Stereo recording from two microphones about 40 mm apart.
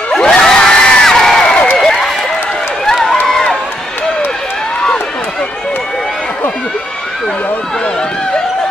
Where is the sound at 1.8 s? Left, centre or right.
Centre.